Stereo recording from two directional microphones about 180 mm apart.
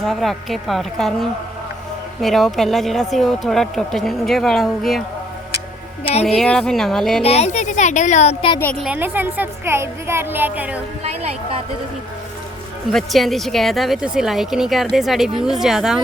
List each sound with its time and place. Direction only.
0.0 s speech: centre (ahead or behind)
6.2 s speech: 5° left (ahead or behind)
7.3 s speech: 35° left (ahead or behind)
8.5 s a woman's voice: 10° left (ahead or behind)
8.8 s a woman's voice: 10° right (ahead or behind)
12.9 s speech: centre (ahead or behind)